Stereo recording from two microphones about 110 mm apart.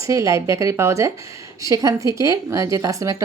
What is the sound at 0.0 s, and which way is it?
Speech, 30° right (ahead or behind).